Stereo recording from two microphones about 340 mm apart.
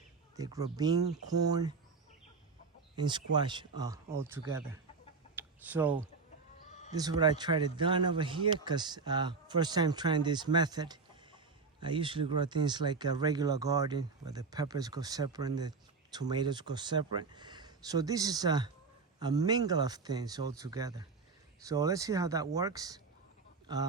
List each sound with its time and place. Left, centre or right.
0.3 s speech: centre
3.0 s speech: centre
6.7 s sheep: left
6.9 s speech: centre